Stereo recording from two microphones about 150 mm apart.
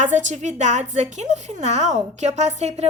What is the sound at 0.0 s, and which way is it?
A woman's voice, 55° right (ahead or behind).